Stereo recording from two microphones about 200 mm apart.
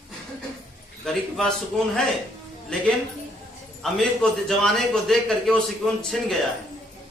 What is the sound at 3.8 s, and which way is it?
A man's voice, 5° left (ahead or behind).